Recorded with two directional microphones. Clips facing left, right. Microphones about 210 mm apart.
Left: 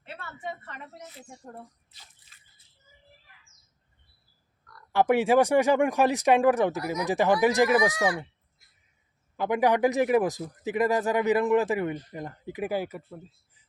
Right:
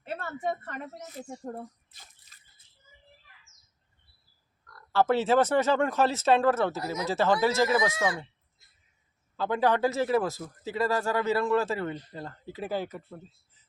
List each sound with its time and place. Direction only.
0.0 s speech: 45° right (ahead or behind)
4.9 s a man's voice: 15° left (ahead or behind)
9.3 s a man's voice: 15° left (ahead or behind)